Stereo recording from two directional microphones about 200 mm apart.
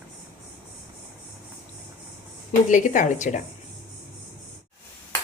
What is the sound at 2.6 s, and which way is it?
Speech, 40° left (ahead or behind).